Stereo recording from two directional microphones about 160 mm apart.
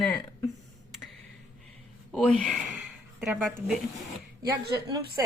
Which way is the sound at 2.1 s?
Centre (ahead or behind).